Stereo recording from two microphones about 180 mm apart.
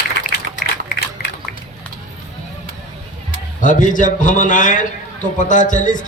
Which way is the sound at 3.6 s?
45° left (ahead or behind).